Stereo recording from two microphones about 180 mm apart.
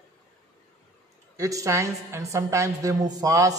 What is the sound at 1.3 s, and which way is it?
A woman's voice, 20° right (ahead or behind).